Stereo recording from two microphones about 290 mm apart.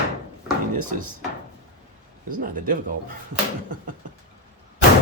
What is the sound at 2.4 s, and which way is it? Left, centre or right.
Speech, right.